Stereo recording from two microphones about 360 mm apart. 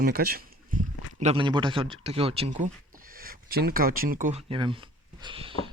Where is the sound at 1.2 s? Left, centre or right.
Centre.